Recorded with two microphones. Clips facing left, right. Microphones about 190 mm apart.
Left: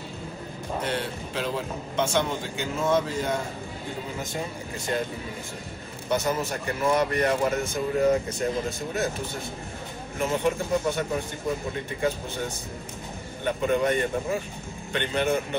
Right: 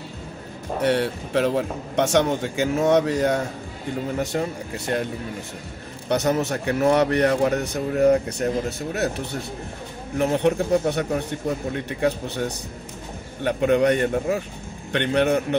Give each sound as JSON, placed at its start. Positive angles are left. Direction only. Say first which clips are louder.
{"t": 0.7, "sound": "speech", "louder": "right 9 dB", "side_deg": -70}
{"t": 4.9, "sound": "speech", "louder": "right 3 dB", "side_deg": -55}
{"t": 6.0, "sound": "speech", "louder": "right 5 dB", "side_deg": -70}
{"t": 10.1, "sound": "speech", "louder": "right 5 dB", "side_deg": -65}